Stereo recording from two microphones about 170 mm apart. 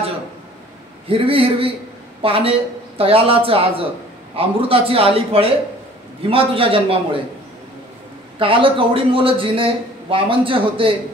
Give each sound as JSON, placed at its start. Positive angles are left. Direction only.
{"t": 1.0, "sound": "a man's voice", "side_deg": -35}
{"t": 8.4, "sound": "a man's voice", "side_deg": -30}